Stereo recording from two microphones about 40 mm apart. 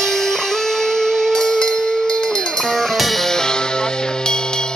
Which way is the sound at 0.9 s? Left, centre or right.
Centre.